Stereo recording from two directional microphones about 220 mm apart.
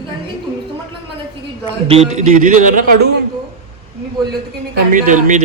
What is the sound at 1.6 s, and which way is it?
A man's voice, 25° right (ahead or behind).